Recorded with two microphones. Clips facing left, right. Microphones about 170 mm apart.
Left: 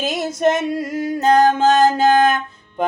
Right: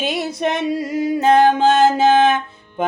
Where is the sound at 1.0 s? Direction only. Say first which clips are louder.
Right 4 dB; 5° right (ahead or behind).